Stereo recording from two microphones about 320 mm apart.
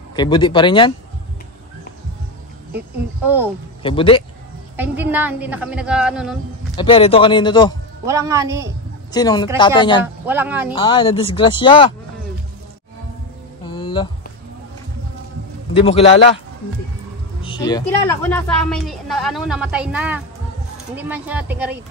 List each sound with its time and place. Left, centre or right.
0.1 s speech: centre
3.8 s speech: centre
4.7 s a woman's voice: centre
6.8 s speech: centre
8.1 s a man's voice: centre
9.1 s speech: centre
10.2 s a woman's voice: centre
10.7 s speech: centre
13.7 s a sound: centre
15.7 s a man's voice: centre
17.4 s a woman's voice: centre